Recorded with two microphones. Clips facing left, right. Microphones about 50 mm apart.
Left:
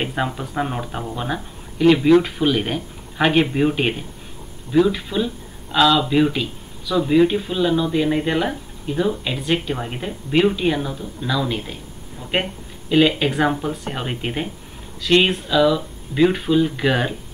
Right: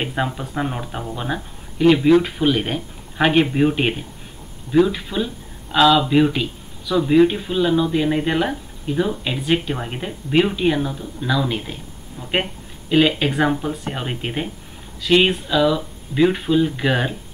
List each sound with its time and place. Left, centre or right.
0.0 s speech: centre